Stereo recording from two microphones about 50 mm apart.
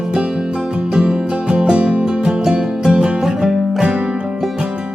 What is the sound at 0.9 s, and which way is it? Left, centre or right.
Music, centre.